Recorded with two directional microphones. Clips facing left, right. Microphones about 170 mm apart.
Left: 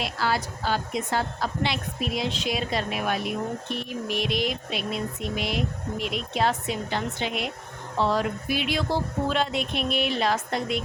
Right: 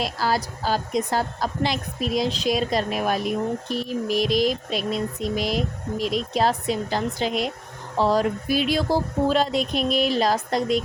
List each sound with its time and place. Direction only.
0.0 s a woman's voice: 40° right (ahead or behind)